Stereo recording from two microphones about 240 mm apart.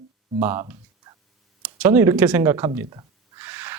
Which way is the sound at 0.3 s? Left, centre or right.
Centre.